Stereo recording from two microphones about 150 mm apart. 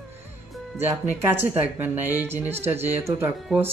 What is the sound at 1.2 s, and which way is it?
Speech, 15° right (ahead or behind).